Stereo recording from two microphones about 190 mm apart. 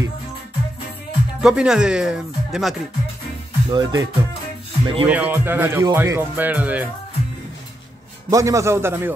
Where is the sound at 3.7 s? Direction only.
20° right (ahead or behind).